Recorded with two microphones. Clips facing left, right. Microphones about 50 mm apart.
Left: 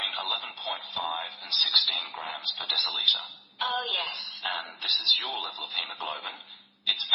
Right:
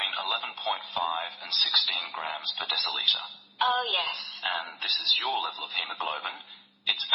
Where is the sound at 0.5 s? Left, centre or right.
Right.